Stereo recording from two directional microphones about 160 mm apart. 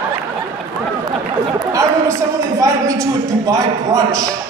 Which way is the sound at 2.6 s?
20° right (ahead or behind).